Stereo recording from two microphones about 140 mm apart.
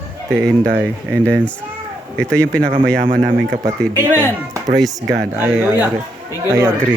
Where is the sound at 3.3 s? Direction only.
20° right (ahead or behind).